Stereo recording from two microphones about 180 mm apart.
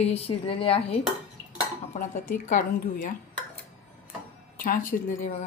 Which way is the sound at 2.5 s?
45° left (ahead or behind).